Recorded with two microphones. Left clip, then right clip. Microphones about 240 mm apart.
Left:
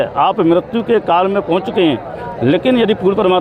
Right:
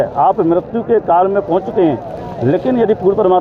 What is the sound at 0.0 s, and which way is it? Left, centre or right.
A man's voice, left.